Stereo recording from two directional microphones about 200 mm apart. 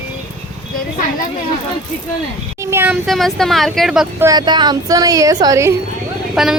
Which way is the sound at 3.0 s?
Centre (ahead or behind).